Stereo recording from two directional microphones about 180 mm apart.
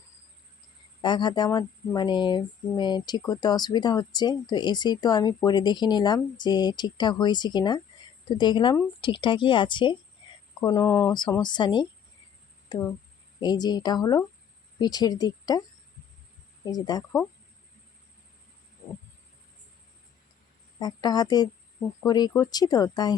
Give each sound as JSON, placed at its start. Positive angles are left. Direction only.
{"t": 1.0, "sound": "speech", "side_deg": 25}
{"t": 12.6, "sound": "a sound", "side_deg": 20}
{"t": 13.4, "sound": "speech", "side_deg": 25}
{"t": 16.6, "sound": "speech", "side_deg": 20}
{"t": 20.7, "sound": "speech", "side_deg": 20}